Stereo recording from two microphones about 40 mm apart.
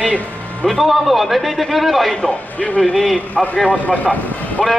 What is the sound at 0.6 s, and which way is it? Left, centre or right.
A man's voice, centre.